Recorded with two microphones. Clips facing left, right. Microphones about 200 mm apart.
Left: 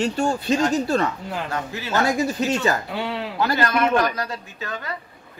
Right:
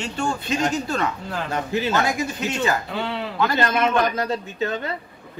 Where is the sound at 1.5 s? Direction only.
20° right (ahead or behind).